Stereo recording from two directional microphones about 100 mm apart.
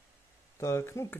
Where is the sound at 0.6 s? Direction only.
30° left (ahead or behind).